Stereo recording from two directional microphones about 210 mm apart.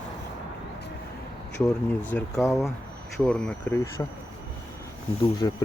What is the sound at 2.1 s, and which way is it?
Speech, 10° left (ahead or behind).